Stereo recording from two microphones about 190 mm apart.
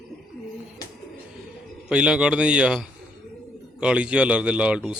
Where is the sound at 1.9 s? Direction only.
5° right (ahead or behind).